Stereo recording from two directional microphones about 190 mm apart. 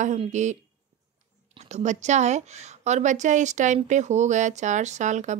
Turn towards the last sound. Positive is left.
turn(degrees=-40)  # may be behind; listen again after turning